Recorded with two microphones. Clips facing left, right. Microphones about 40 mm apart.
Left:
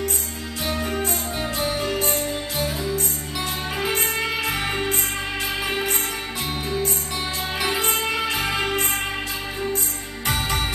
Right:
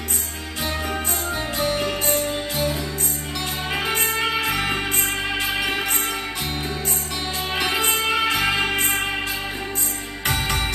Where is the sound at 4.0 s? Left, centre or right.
Right.